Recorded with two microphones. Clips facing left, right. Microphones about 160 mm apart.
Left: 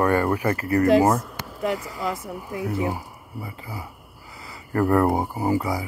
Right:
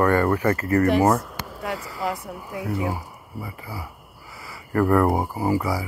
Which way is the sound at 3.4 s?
25° left (ahead or behind).